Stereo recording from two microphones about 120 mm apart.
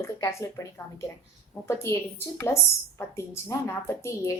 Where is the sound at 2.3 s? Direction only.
20° left (ahead or behind).